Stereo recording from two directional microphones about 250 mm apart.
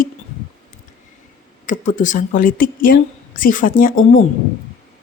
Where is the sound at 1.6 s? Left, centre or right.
Left.